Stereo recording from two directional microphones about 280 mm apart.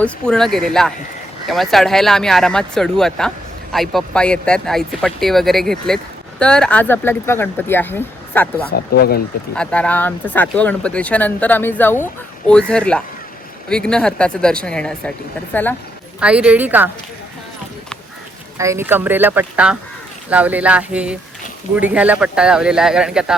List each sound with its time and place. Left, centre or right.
0.0 s speech: centre
8.7 s speech: left
9.6 s speech: centre
16.2 s speech: centre
18.5 s speech: centre